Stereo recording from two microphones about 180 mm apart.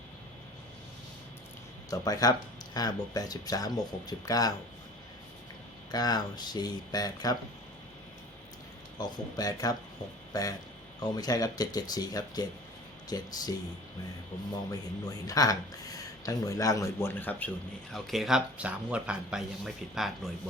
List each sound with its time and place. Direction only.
1.9 s speech: 20° left (ahead or behind)
5.9 s speech: 20° left (ahead or behind)
9.0 s speech: 20° left (ahead or behind)
14.5 s speech: 20° left (ahead or behind); by 20.1 s 5° right (ahead or behind)